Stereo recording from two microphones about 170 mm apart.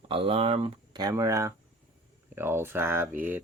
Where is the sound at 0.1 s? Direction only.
30° right (ahead or behind).